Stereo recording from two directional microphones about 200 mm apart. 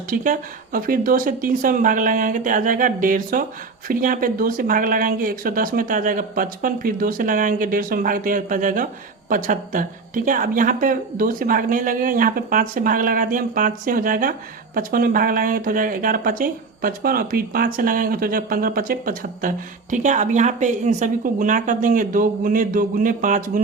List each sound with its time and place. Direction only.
0.1 s speech: 45° right (ahead or behind)